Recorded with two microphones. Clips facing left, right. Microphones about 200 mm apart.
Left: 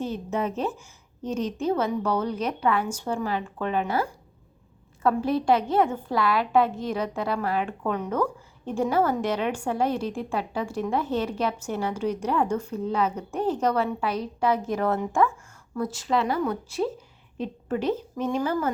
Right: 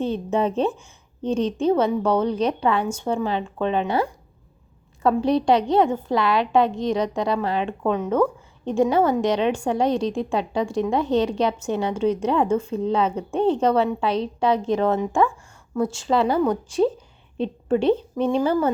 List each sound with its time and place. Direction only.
0.0 s a woman's voice: 30° right (ahead or behind)
5.0 s a woman's voice: 25° right (ahead or behind)
17.3 s a woman's voice: 30° right (ahead or behind)